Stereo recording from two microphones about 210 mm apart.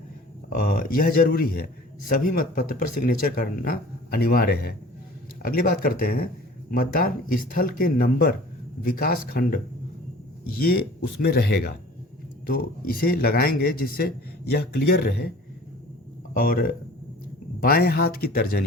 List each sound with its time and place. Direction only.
0.5 s a man's voice: 45° left (ahead or behind)
11.2 s a man's voice: 50° left (ahead or behind)
16.3 s a man's voice: 40° left (ahead or behind)